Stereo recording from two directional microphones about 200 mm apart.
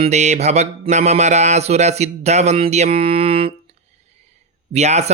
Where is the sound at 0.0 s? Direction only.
35° right (ahead or behind).